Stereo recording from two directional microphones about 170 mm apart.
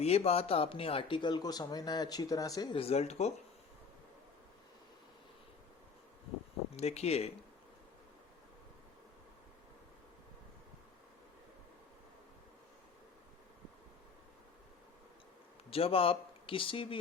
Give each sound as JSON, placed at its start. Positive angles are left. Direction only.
{"t": 0.0, "sound": "speech", "side_deg": 35}
{"t": 6.7, "sound": "speech", "side_deg": 40}
{"t": 15.7, "sound": "speech", "side_deg": 35}